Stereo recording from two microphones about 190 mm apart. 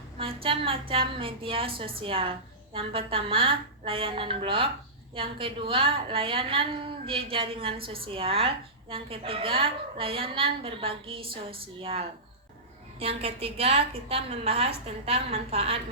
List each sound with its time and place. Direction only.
0.2 s a woman's voice: 30° right (ahead or behind)